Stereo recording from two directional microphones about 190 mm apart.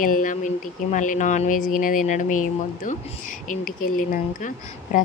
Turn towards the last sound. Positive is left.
turn(degrees=45)  # may be behind; listen again after turning